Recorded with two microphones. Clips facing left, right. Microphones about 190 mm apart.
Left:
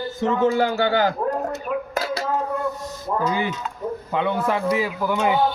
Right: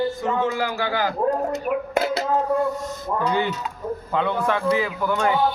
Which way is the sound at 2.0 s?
25° right (ahead or behind).